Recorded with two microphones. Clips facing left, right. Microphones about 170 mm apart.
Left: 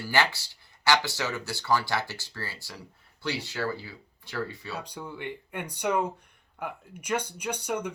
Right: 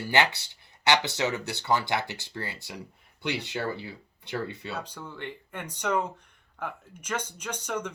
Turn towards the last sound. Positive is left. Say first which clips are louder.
# left 2 dB
turn(degrees=10)  # may be behind; listen again after turning